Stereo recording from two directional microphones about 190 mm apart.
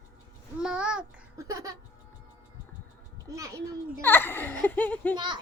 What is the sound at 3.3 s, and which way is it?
Child singing, 15° right (ahead or behind).